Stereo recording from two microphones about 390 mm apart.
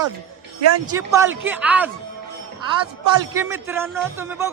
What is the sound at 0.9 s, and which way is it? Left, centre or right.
Speech, centre.